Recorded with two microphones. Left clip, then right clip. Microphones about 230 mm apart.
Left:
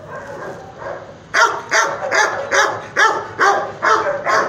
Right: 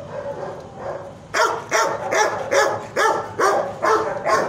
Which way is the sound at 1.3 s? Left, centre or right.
Right.